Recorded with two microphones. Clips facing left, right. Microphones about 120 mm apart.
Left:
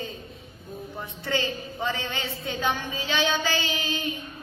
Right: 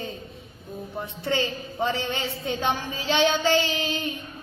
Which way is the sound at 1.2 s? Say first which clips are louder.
Right 2 dB; 25° right (ahead or behind).